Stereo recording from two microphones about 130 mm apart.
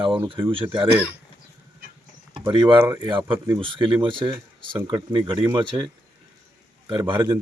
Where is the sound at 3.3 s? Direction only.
20° right (ahead or behind).